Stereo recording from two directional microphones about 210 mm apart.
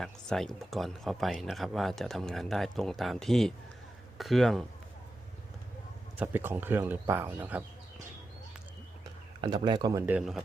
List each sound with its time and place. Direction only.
0.0 s speech: centre (ahead or behind)
6.1 s speech: 10° right (ahead or behind)
9.4 s speech: 20° right (ahead or behind)
10.2 s speech: centre (ahead or behind)